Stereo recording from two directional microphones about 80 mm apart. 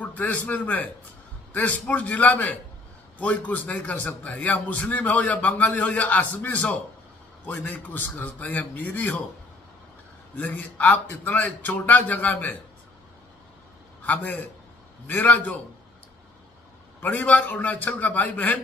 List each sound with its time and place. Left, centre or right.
0.0 s a man's voice: centre
10.3 s a man's voice: centre
14.0 s a man's voice: centre
17.0 s a man's voice: centre